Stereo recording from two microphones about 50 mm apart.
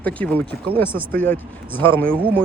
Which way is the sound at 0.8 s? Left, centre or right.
Left.